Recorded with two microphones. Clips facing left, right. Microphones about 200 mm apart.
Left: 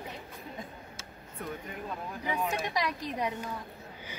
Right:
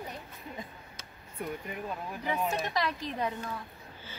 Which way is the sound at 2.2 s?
10° left (ahead or behind).